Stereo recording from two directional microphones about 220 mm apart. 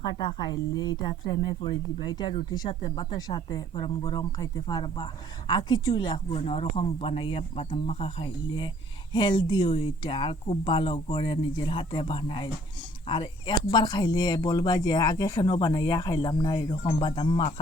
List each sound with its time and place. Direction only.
0.0 s speech: 20° left (ahead or behind)
13.7 s speech: 20° left (ahead or behind)